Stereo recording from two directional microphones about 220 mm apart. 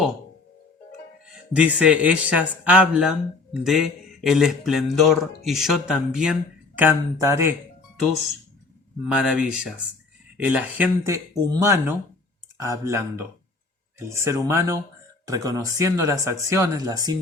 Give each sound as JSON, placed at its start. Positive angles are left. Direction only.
{"t": 1.5, "sound": "speech", "side_deg": -5}
{"t": 9.1, "sound": "speech", "side_deg": -5}
{"t": 14.1, "sound": "speech", "side_deg": -15}